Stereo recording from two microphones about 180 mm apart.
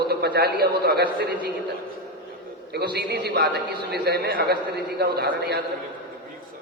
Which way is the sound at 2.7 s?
65° right (ahead or behind).